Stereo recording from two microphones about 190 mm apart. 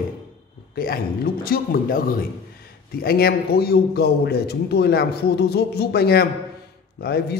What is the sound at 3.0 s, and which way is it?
A man's voice, 55° left (ahead or behind).